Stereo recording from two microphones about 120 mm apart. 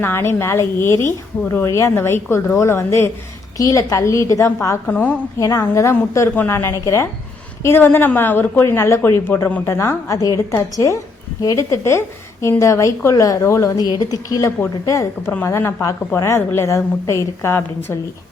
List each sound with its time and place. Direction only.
0.0 s a woman's voice: 20° left (ahead or behind)
5.4 s a woman's voice: 25° left (ahead or behind)